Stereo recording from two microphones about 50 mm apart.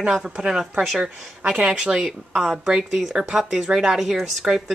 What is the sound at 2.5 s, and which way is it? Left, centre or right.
Speech, centre.